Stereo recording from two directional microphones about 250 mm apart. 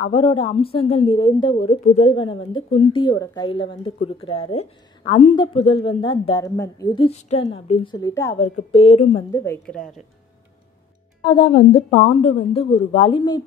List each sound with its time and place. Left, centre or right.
0.0 s a woman's voice: left
7.1 s a woman's voice: left
8.4 s a woman's voice: left
9.3 s a woman's voice: centre
11.2 s a woman's voice: left